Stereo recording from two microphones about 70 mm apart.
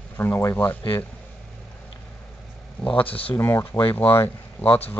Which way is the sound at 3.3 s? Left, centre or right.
Left.